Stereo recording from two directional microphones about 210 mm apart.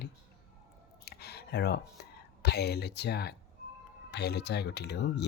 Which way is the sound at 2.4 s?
50° left (ahead or behind).